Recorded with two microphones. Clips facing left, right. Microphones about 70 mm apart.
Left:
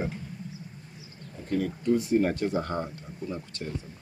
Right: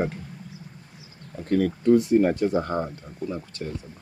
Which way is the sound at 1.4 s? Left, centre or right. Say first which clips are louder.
Right 6 dB; right.